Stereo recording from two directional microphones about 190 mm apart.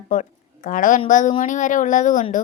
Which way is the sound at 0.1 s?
45° left (ahead or behind).